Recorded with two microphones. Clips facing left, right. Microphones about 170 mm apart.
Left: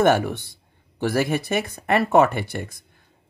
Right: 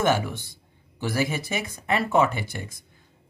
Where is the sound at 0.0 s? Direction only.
60° left (ahead or behind).